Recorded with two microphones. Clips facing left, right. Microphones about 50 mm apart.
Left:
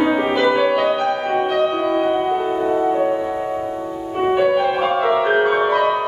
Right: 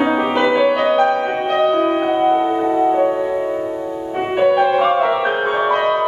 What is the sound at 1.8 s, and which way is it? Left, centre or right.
Music, right.